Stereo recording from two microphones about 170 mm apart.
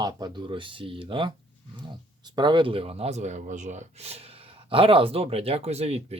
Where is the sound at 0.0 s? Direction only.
25° right (ahead or behind).